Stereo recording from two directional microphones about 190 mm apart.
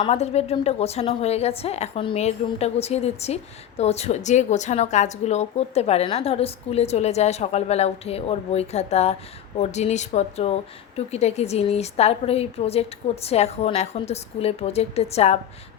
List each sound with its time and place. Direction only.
0.0 s a woman's voice: 35° left (ahead or behind)